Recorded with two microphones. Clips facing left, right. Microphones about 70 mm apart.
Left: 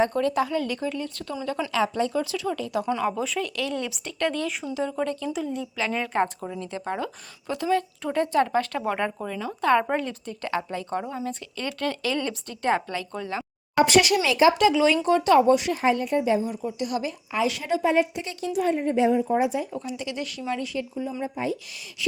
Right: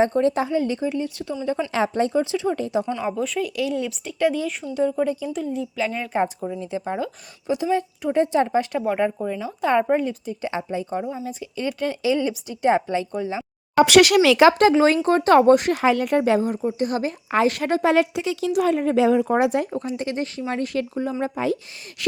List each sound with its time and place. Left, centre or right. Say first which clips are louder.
0.0 s speech: right 3 dB; right; by 1.4 s centre
1.7 s speech: right 3 dB; right
2.3 s speech: right 5 dB; right
3.2 s a woman's voice: right 4 dB; centre
13.8 s speech: right 7 dB; right
14.6 s speech: right 4 dB; right
15.7 s speech: right 4 dB; right
16.7 s speech: right 4 dB; right
17.3 s speech: right 5 dB; right
17.9 s a woman's voice: right 4 dB; right
19.7 s speech: right 5 dB; right
20.7 s speech: right 5 dB; right